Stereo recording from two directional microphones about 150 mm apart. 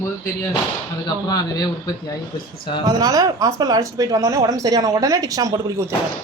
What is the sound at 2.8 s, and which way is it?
Speech, 25° right (ahead or behind).